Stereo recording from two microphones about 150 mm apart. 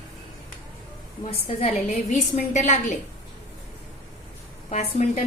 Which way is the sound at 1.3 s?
40° left (ahead or behind).